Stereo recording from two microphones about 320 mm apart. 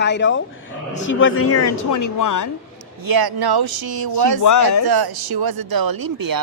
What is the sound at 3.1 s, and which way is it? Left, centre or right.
Speech, right.